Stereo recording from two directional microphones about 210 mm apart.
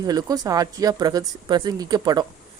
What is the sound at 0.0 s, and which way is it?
Speech, 15° right (ahead or behind).